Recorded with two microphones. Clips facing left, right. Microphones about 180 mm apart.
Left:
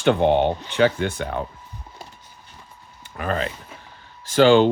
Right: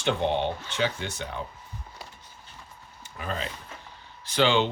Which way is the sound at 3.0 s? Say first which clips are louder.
Left 8 dB; 65° left (ahead or behind).